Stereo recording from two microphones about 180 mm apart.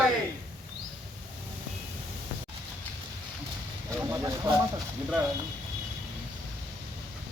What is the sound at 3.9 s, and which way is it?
Speech, 15° right (ahead or behind).